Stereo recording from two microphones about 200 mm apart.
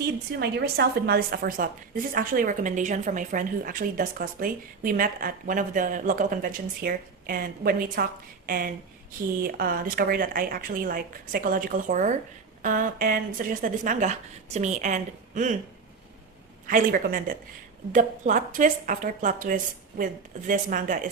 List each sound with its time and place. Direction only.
0.0 s a woman's voice: 55° right (ahead or behind)
16.6 s a woman's voice: 45° right (ahead or behind)